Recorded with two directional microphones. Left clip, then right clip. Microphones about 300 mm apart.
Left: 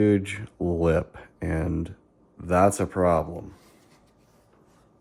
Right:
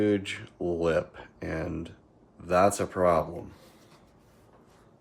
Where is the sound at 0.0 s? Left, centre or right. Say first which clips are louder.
Left 4 dB; left.